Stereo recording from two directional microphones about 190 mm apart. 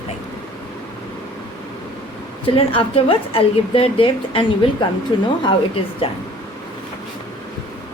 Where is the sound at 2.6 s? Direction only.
30° left (ahead or behind).